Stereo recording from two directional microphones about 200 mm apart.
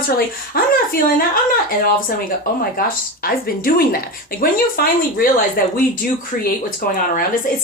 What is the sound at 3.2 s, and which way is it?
Speech, 45° left (ahead or behind).